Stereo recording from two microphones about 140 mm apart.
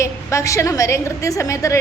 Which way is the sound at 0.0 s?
20° left (ahead or behind).